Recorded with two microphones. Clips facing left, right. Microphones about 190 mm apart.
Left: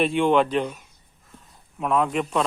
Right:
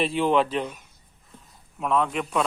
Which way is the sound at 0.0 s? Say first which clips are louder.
Left 3 dB; centre (ahead or behind).